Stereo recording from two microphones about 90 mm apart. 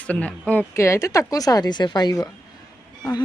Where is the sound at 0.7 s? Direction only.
30° left (ahead or behind); by 2.2 s 50° left (ahead or behind).